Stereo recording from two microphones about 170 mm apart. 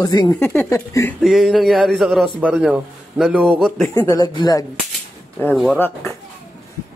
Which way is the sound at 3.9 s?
20° left (ahead or behind).